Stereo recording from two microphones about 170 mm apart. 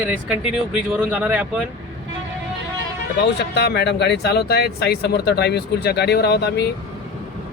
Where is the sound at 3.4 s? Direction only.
80° left.